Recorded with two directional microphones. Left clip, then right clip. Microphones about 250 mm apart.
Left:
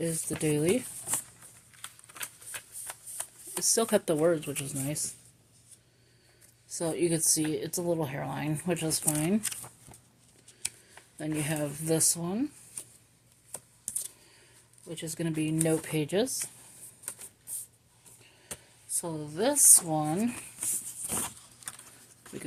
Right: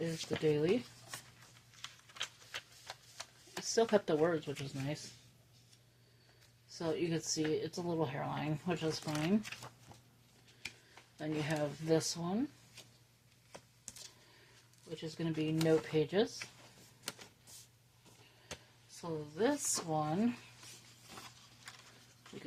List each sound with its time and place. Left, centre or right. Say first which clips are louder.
0.0 s speech: left 3 dB; left
1.8 s typewriter: left 1 dB; centre
3.6 s speech: left 4 dB; left
6.7 s speech: left 7 dB; left
11.2 s speech: left 4 dB; left
14.8 s speech: left 6 dB; left
19.0 s speech: left 5 dB; left